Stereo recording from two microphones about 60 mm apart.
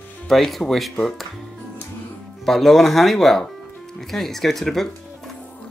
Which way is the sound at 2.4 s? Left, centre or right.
Centre.